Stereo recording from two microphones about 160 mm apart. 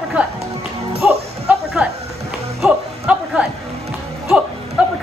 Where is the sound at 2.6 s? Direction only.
5° right (ahead or behind).